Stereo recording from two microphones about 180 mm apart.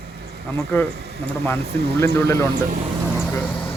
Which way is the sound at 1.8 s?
65° right (ahead or behind).